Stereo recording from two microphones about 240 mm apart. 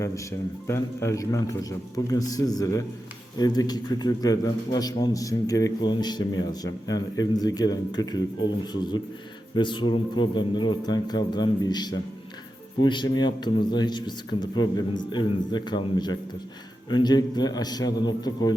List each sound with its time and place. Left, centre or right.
0.0 s a man's voice: centre